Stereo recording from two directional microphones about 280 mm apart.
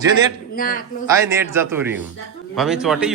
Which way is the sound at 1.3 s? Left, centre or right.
Centre.